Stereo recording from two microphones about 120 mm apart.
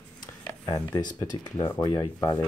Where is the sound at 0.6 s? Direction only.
35° left (ahead or behind).